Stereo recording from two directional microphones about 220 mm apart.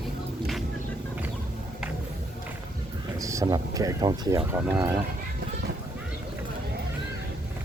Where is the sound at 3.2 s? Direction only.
15° right (ahead or behind).